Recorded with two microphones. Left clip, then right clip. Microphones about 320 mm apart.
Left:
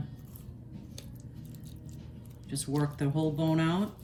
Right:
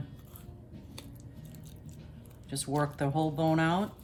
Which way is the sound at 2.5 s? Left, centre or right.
Centre.